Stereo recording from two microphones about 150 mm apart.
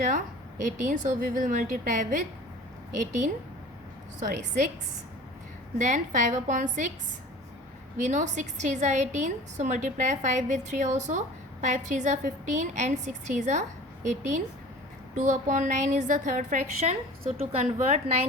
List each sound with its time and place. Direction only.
0.6 s a woman's voice: 60° right (ahead or behind)
4.3 s a woman's voice: 55° right (ahead or behind)
5.8 s a woman's voice: 55° right (ahead or behind)
7.9 s a woman's voice: 55° right (ahead or behind)